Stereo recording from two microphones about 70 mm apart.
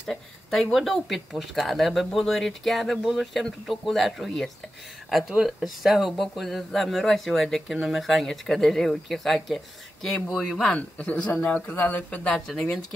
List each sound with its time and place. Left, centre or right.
0.0 s speech: centre
10.6 s speech: centre
12.3 s speech: centre